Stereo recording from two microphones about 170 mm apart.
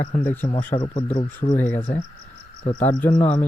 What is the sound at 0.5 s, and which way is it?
Speech, 35° left (ahead or behind).